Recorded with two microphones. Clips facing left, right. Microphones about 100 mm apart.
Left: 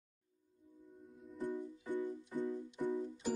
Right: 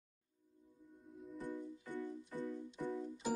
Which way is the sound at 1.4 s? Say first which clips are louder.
Left 5 dB; 15° left (ahead or behind).